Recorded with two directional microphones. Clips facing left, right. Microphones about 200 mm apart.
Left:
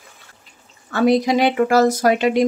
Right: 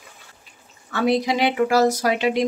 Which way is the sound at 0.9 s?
45° left (ahead or behind).